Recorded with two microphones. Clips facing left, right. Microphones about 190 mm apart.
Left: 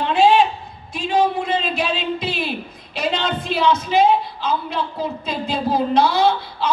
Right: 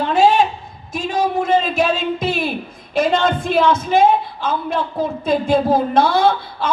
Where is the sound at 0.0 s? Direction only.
45° right (ahead or behind).